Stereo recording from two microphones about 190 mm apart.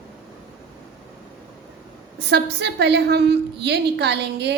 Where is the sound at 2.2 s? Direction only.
60° right (ahead or behind).